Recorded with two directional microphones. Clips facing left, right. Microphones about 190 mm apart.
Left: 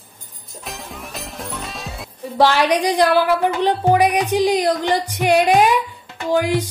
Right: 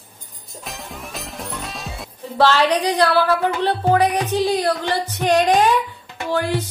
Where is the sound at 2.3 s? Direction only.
15° left (ahead or behind).